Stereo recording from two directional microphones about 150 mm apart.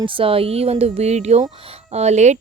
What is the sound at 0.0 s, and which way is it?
Speech, 35° right (ahead or behind).